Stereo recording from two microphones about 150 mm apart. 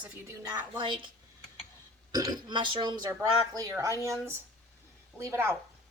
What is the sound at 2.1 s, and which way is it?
A woman's voice, 30° right (ahead or behind).